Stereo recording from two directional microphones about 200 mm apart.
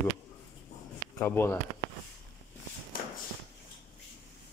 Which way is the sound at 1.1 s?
10° left (ahead or behind).